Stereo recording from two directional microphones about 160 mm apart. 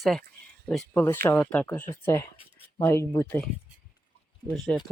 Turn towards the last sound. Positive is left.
turn(degrees=5)  # may be behind; listen again after turning